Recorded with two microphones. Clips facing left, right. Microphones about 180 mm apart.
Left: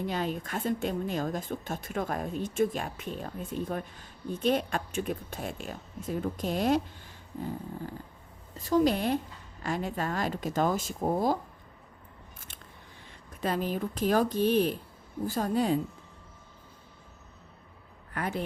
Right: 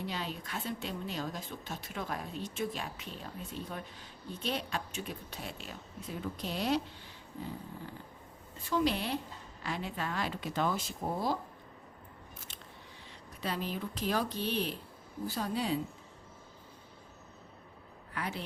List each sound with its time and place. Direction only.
0.0 s speech: 50° left (ahead or behind)
8.5 s speech: 40° left (ahead or behind)
13.4 s speech: 45° left (ahead or behind)
18.1 s a man's voice: 50° left (ahead or behind)